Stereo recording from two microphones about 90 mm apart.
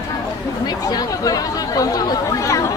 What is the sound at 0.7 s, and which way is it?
Chatter, 50° left (ahead or behind).